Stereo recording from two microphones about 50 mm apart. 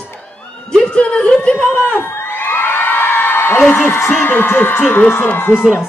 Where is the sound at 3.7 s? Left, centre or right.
Left.